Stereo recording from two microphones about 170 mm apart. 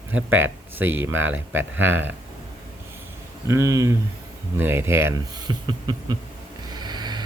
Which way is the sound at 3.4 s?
20° right (ahead or behind).